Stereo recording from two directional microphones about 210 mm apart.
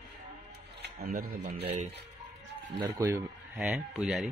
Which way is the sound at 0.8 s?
45° right (ahead or behind).